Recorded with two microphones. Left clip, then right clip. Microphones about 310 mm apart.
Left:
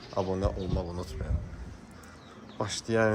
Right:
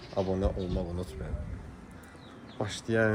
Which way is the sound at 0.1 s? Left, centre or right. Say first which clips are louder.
Even; centre.